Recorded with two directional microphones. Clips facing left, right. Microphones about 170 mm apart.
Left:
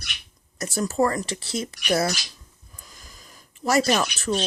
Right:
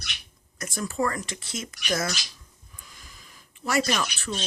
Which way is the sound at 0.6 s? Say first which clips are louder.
Left 5 dB; 35° left (ahead or behind).